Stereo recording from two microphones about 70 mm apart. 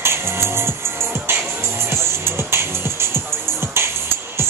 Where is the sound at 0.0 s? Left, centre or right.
Right.